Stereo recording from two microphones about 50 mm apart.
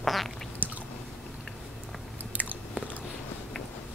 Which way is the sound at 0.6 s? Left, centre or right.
Right.